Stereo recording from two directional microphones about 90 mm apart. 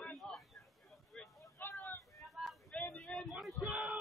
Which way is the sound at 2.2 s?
Centre (ahead or behind).